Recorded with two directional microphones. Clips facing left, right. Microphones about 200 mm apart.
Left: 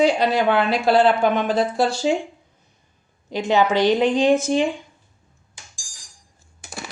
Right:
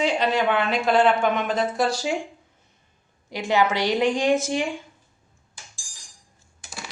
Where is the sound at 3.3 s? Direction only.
20° left (ahead or behind).